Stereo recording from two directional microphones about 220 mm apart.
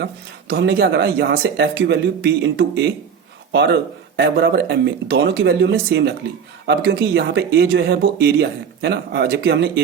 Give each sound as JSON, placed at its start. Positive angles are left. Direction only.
{"t": 0.0, "sound": "speech", "side_deg": -50}